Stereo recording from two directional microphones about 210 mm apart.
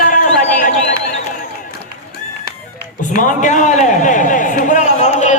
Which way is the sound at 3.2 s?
35° left (ahead or behind).